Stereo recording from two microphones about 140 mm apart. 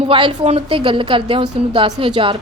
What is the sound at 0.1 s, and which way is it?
A woman's voice, 40° right (ahead or behind).